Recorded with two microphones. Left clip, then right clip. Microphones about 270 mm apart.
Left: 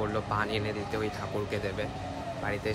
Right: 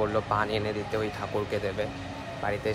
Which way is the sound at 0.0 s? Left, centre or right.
Centre.